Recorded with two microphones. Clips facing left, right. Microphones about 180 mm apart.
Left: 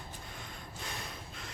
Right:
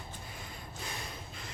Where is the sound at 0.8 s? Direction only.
Centre (ahead or behind).